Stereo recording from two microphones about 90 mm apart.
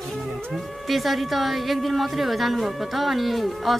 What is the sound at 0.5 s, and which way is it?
Speech, centre (ahead or behind).